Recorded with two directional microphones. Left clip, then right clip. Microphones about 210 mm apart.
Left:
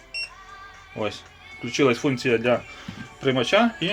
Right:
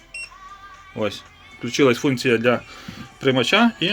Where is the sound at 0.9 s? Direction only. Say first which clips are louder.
Right 3 dB; 35° right (ahead or behind).